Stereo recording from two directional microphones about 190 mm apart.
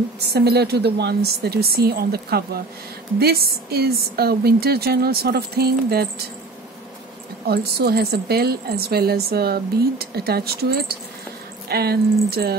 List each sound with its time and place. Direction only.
0.2 s a woman's voice: 60° right (ahead or behind)
7.4 s a woman's voice: 55° right (ahead or behind)